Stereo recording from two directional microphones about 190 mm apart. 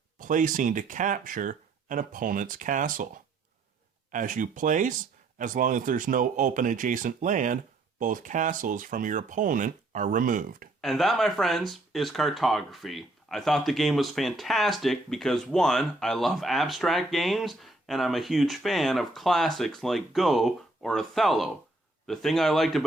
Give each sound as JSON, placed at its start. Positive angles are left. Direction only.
{"t": 0.2, "sound": "speech", "side_deg": -45}
{"t": 4.1, "sound": "speech", "side_deg": -45}
{"t": 10.8, "sound": "speech", "side_deg": 0}